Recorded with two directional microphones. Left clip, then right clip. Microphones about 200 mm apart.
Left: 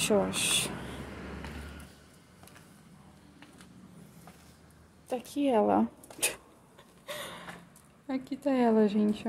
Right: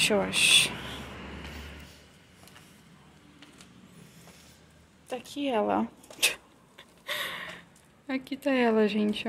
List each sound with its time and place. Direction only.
0.0 s speech: 15° left (ahead or behind)
5.1 s speech: 30° left (ahead or behind)
6.8 s a sound: 5° left (ahead or behind)
8.1 s speech: 5° left (ahead or behind)